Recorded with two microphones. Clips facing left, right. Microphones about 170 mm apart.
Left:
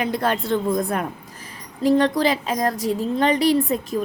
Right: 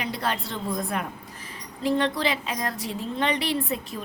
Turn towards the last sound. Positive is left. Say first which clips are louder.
# left 8 dB
turn(degrees=40)  # may be behind; listen again after turning